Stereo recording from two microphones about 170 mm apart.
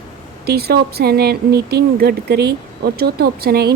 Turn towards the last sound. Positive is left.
turn(degrees=-65)  # may be behind; listen again after turning